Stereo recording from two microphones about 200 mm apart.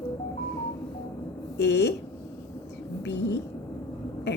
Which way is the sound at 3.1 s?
60° left (ahead or behind).